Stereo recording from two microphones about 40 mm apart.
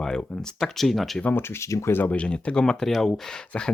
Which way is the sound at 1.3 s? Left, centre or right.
Left.